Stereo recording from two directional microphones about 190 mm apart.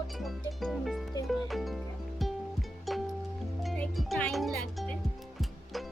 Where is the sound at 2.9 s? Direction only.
Centre (ahead or behind).